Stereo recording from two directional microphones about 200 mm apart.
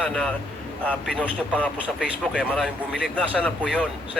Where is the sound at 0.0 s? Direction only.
5° left (ahead or behind).